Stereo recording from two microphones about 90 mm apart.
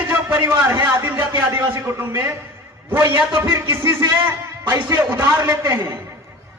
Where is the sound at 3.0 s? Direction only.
60° right (ahead or behind).